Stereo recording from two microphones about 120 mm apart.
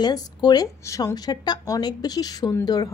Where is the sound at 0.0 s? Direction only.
35° left (ahead or behind).